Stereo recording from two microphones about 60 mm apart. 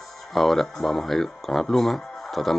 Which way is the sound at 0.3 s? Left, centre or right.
Centre.